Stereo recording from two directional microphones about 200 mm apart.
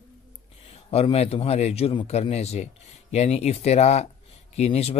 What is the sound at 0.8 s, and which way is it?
Speech, 30° left (ahead or behind).